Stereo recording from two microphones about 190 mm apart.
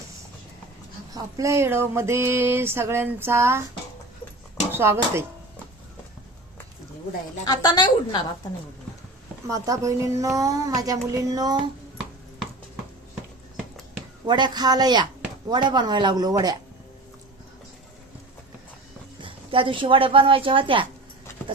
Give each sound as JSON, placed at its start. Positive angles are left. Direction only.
{"t": 1.1, "sound": "a sound", "side_deg": -15}
{"t": 4.7, "sound": "speech", "side_deg": -10}
{"t": 7.4, "sound": "a woman's voice", "side_deg": 20}
{"t": 9.5, "sound": "a sound", "side_deg": -15}
{"t": 14.3, "sound": "a woman's voice", "side_deg": -25}
{"t": 19.2, "sound": "a woman's voice", "side_deg": -25}